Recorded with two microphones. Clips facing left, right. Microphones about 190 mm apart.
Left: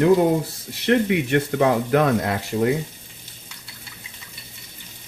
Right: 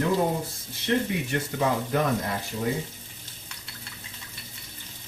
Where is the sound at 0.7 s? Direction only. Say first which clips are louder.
Left 7 dB; 75° left (ahead or behind).